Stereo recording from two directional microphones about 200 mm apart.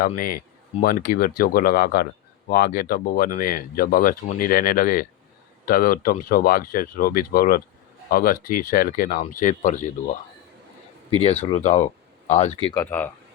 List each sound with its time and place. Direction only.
0.2 s speech: 45° left (ahead or behind)
11.2 s speech: 30° left (ahead or behind)
12.7 s speech: 10° left (ahead or behind)